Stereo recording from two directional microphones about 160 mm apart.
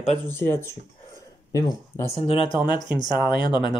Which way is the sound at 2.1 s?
35° left (ahead or behind).